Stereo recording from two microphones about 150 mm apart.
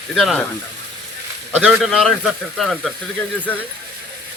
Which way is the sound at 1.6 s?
5° right (ahead or behind).